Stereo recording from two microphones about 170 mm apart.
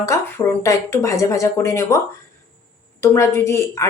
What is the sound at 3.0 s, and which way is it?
Speech, 15° left (ahead or behind).